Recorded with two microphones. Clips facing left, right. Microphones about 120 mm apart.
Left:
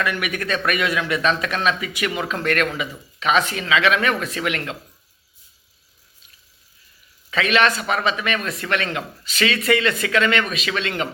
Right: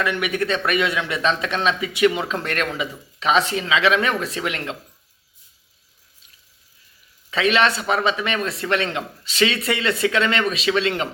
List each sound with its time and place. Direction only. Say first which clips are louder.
0.0 s a man's voice: right 2 dB; 25° right (ahead or behind)
7.3 s a man's voice: even; 30° right (ahead or behind)